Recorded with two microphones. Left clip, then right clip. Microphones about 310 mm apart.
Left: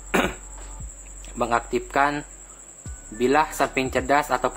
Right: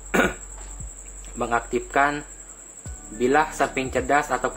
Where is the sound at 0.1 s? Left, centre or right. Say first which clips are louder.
Right 2 dB; centre.